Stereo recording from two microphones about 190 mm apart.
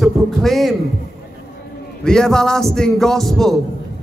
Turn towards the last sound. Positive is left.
turn(degrees=0)  # may be behind; listen again after turning